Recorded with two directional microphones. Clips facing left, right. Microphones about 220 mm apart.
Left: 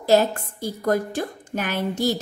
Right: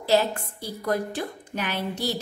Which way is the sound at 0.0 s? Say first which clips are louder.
Left 4 dB; 45° left (ahead or behind).